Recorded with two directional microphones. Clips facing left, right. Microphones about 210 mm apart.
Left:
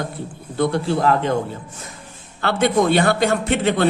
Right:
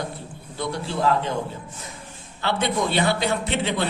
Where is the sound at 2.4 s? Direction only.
50° left (ahead or behind).